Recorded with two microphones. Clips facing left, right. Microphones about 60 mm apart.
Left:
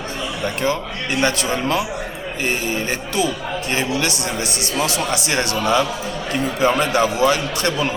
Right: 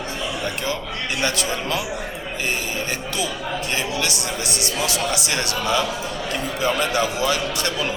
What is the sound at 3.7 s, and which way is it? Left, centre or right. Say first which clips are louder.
A woman's voice: left 5 dB; left.